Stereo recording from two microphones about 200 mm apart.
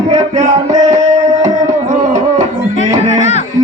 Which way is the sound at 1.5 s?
35° right (ahead or behind).